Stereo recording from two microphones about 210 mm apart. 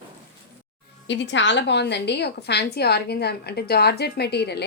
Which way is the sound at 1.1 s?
60° left (ahead or behind).